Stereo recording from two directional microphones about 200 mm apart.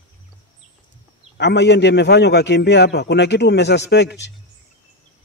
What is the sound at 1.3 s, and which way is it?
A man's voice, 60° left (ahead or behind).